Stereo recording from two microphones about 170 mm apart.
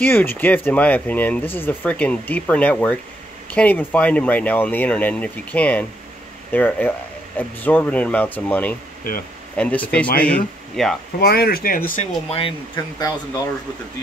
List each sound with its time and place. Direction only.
0.0 s speech: 10° left (ahead or behind)
11.1 s speech: 65° left (ahead or behind)
12.3 s speech: 30° left (ahead or behind)